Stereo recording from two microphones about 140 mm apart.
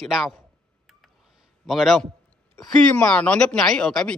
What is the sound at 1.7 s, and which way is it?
Speech, centre (ahead or behind).